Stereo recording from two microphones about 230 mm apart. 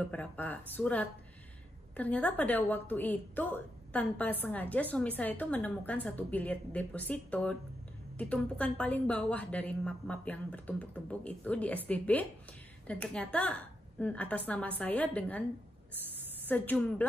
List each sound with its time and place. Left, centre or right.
0.0 s a woman's voice: centre
16.4 s a woman's voice: centre